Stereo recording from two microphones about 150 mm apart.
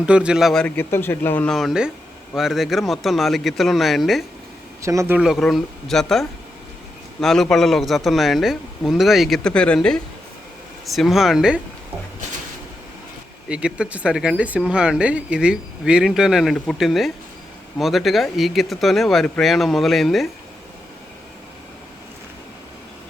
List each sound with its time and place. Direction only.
0.0 s speech: 5° right (ahead or behind)
0.8 s speech: 15° left (ahead or behind)
1.5 s speech: 5° right (ahead or behind)
4.8 s a man's voice: 20° right (ahead or behind)
5.1 s speech: 5° right (ahead or behind)
13.5 s speech: 5° right (ahead or behind)